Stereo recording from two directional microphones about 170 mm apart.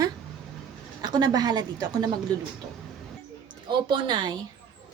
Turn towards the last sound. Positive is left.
turn(degrees=-25)  # may be behind; listen again after turning